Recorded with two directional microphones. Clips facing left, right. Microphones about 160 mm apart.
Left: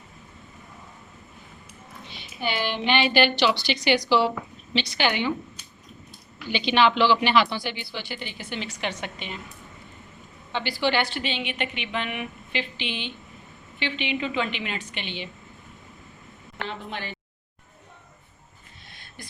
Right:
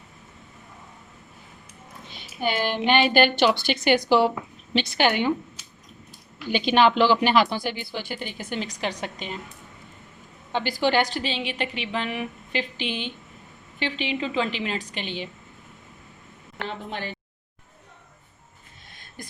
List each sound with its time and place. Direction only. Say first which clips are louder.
2.0 s speech: right 3 dB; 45° right (ahead or behind)
6.5 s speech: right 2 dB; 45° right (ahead or behind)
10.5 s a woman's voice: right 2 dB; 45° right (ahead or behind)
16.6 s speech: right 2 dB; 45° right (ahead or behind)
18.9 s a sound: right 3 dB; 45° right (ahead or behind)